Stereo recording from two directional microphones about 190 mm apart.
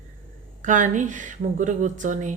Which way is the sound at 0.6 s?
40° right (ahead or behind).